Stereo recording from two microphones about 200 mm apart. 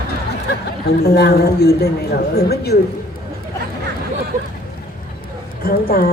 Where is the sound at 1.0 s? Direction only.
50° left (ahead or behind).